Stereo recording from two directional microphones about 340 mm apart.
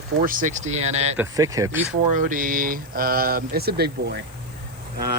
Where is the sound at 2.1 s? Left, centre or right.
Right.